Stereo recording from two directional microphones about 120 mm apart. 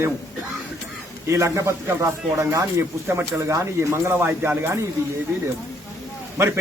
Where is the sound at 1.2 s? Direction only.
25° right (ahead or behind).